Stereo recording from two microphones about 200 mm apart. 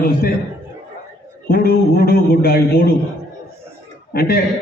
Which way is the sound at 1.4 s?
50° left (ahead or behind).